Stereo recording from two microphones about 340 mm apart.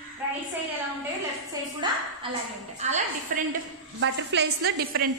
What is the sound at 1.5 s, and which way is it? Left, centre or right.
A woman's voice, centre.